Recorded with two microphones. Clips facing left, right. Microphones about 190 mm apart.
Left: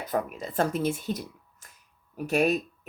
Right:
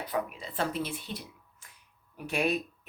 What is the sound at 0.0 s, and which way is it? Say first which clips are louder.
Speech: left 3 dB; 45° left (ahead or behind).